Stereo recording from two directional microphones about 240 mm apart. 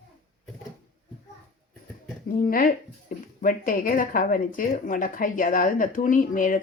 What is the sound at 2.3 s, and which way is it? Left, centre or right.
Speech, left.